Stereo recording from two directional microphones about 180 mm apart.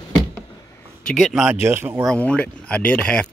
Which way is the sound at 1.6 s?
15° right (ahead or behind).